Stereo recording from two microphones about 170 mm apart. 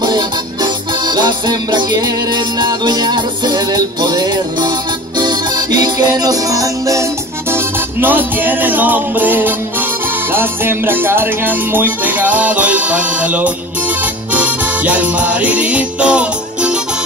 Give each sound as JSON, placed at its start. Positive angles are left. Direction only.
{"t": 0.0, "sound": "music", "side_deg": -25}